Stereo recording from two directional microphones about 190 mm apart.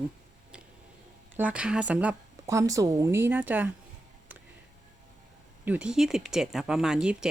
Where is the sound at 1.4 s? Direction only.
5° right (ahead or behind).